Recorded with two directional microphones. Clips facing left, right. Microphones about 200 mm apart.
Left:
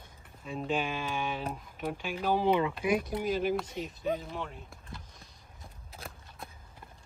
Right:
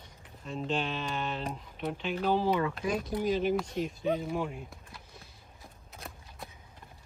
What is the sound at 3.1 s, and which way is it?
Speech, 5° left (ahead or behind).